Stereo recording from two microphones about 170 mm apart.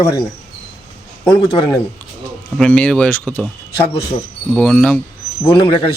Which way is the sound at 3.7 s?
30° left (ahead or behind).